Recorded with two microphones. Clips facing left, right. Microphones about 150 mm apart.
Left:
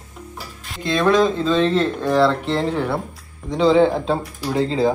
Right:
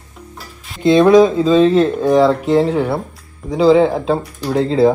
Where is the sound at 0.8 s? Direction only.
20° right (ahead or behind).